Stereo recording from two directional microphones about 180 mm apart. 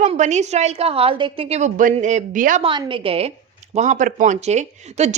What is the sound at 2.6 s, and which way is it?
Speech, 25° right (ahead or behind).